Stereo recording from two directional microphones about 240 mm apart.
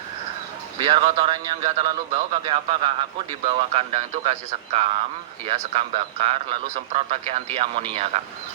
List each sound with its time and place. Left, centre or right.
0.8 s a man's voice: right